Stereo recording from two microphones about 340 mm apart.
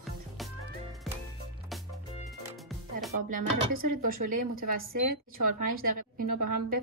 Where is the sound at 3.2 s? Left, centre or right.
Right.